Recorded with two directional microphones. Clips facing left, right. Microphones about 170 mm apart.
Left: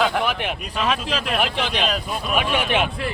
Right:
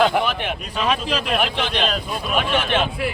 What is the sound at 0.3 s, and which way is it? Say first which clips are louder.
A man's voice: even; centre (ahead or behind).